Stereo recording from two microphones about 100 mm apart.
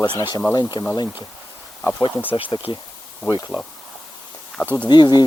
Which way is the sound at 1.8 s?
10° left (ahead or behind).